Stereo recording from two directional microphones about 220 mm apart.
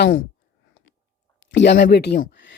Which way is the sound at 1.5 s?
50° left (ahead or behind).